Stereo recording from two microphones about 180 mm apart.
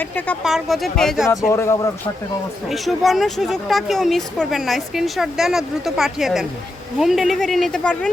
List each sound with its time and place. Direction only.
0.0 s speech: 10° left (ahead or behind)
1.3 s speech: 15° left (ahead or behind)
2.6 s speech: centre (ahead or behind)